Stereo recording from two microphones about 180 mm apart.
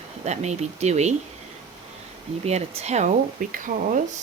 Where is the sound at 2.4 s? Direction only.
35° right (ahead or behind).